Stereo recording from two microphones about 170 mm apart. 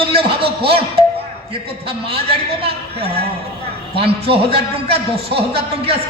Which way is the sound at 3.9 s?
35° right (ahead or behind).